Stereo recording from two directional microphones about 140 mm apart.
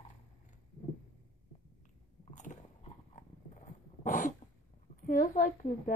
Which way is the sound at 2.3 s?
60° left (ahead or behind).